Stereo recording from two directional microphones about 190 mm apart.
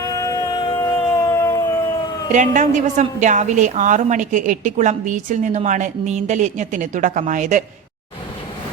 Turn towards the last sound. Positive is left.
turn(degrees=-40)  # may be behind; listen again after turning